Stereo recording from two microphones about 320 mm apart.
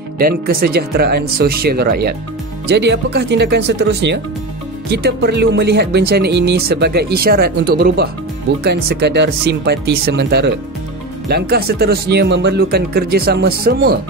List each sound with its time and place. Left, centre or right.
0.2 s speech: right